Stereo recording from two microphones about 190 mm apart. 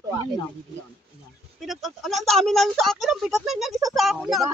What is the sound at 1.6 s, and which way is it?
Speech, centre (ahead or behind).